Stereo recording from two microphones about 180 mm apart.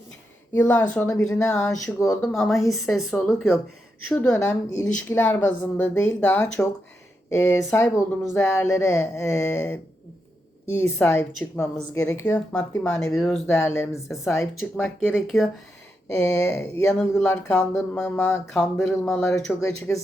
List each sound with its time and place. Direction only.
0.5 s speech: 10° left (ahead or behind)
2.2 s speech: centre (ahead or behind)
10.9 s speech: 10° left (ahead or behind)
13.6 s speech: 15° left (ahead or behind)
15.1 s speech: centre (ahead or behind)
16.1 s speech: 15° left (ahead or behind)